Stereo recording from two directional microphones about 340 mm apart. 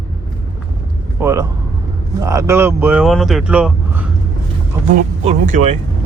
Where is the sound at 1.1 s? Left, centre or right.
Centre.